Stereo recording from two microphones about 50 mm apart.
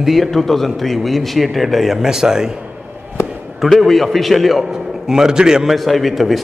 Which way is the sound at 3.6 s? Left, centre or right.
Centre.